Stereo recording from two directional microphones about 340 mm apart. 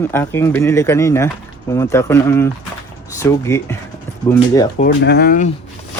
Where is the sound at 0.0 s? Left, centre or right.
Centre.